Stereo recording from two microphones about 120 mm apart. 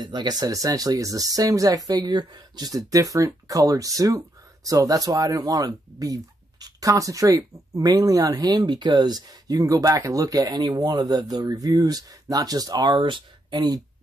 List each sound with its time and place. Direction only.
0.0 s speech: 35° right (ahead or behind)